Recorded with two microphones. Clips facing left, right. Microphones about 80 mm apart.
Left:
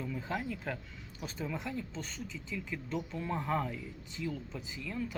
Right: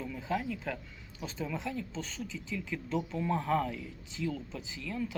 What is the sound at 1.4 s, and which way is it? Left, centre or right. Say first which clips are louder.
Speech: right 2 dB; centre.